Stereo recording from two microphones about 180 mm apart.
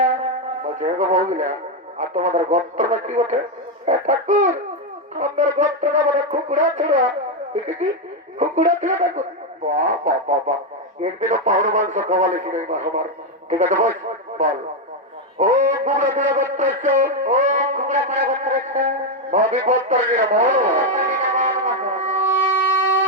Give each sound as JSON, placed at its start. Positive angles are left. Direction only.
{"t": 0.6, "sound": "speech", "side_deg": -45}
{"t": 8.4, "sound": "speech", "side_deg": -45}
{"t": 15.4, "sound": "a sound", "side_deg": -45}